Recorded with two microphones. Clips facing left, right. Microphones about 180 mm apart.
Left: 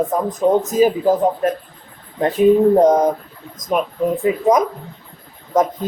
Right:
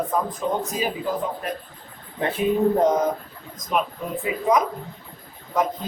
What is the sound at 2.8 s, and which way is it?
A man's voice, 45° left (ahead or behind).